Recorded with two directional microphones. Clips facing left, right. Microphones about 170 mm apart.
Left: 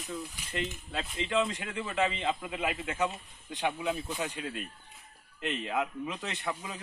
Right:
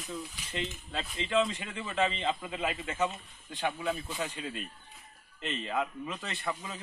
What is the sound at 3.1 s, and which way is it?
Speech, 15° left (ahead or behind).